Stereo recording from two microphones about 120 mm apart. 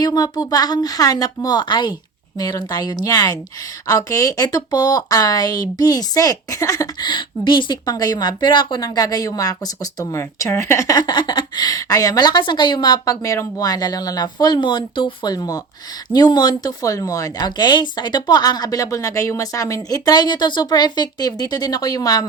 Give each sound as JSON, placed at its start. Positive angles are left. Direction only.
{"t": 0.0, "sound": "speech", "side_deg": 30}